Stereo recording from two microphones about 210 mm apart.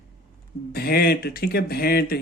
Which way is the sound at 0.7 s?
50° left (ahead or behind).